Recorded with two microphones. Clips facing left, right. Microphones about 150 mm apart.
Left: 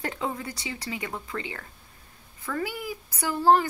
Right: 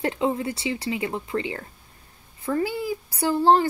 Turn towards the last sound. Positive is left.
turn(degrees=-30)  # may be behind; listen again after turning